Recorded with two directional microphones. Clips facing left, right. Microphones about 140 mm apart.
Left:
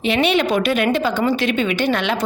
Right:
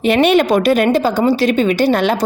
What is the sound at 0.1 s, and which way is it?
A woman's voice, 45° right (ahead or behind).